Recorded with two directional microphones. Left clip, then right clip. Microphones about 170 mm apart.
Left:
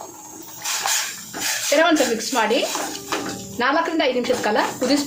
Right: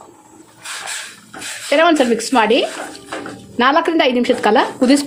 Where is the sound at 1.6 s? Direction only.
60° right (ahead or behind).